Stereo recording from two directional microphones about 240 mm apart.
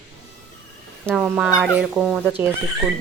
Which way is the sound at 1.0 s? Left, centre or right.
Centre.